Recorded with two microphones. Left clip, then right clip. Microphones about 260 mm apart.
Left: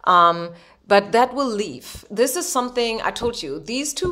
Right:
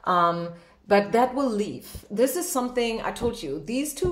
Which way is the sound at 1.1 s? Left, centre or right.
Left.